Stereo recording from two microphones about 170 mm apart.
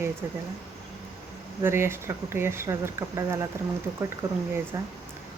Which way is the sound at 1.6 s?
15° right (ahead or behind).